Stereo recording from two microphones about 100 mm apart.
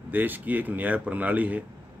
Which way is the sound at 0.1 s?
20° right (ahead or behind).